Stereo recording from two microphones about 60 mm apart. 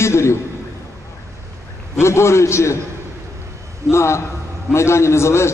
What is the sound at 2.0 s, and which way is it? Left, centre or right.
Speech, left.